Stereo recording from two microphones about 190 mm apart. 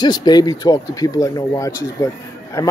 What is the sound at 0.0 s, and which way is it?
A man's voice, 20° left (ahead or behind).